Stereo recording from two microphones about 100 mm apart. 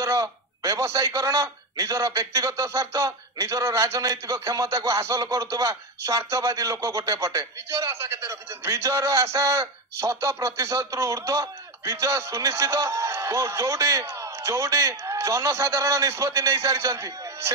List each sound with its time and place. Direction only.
0.0 s a man's voice: 30° right (ahead or behind)